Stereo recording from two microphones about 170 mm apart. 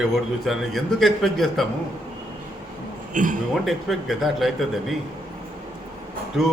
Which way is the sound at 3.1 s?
50° right (ahead or behind).